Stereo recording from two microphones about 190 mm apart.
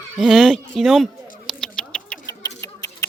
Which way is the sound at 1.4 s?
5° left (ahead or behind).